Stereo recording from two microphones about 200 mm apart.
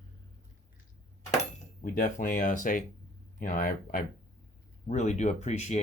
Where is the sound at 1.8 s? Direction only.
40° left (ahead or behind).